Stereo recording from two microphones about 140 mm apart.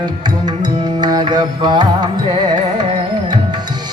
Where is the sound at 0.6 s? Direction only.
30° right (ahead or behind).